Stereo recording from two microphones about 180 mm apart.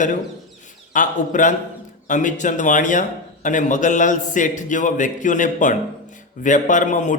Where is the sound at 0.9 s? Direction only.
45° left (ahead or behind).